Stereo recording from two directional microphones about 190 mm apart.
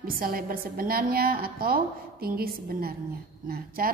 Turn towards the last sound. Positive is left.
turn(degrees=-50)  # may be behind; listen again after turning